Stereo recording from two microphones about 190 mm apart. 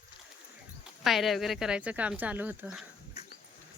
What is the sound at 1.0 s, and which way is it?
Speech, centre (ahead or behind).